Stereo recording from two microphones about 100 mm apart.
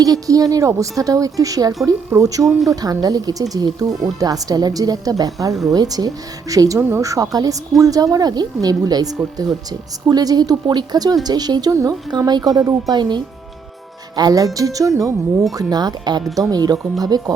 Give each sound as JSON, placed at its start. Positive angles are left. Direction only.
{"t": 0.0, "sound": "a woman's voice", "side_deg": -40}
{"t": 2.4, "sound": "speech", "side_deg": 0}
{"t": 2.6, "sound": "a woman's voice", "side_deg": -35}
{"t": 12.1, "sound": "a woman's voice", "side_deg": -45}
{"t": 14.2, "sound": "a woman's voice", "side_deg": -40}